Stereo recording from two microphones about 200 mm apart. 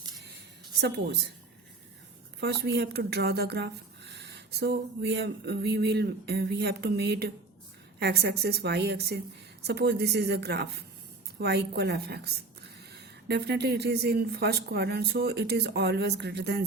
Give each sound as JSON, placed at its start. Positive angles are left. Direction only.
{"t": 0.8, "sound": "speech", "side_deg": -60}
{"t": 2.4, "sound": "a woman's voice", "side_deg": -55}